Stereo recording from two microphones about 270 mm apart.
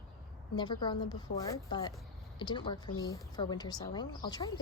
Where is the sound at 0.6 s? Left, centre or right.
Centre.